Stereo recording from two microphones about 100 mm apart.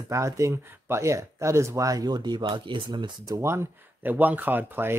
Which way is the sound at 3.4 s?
25° right (ahead or behind).